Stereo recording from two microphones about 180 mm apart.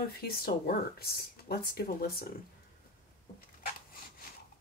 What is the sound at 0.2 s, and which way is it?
Speech, 55° left (ahead or behind).